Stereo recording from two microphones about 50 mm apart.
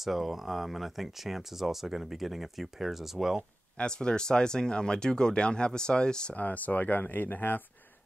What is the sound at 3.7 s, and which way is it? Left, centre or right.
Speech, centre.